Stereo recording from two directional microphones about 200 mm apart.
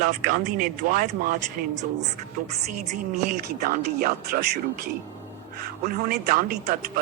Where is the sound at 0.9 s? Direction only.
40° right (ahead or behind).